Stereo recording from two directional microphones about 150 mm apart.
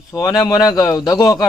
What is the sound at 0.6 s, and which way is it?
Speech, 25° left (ahead or behind).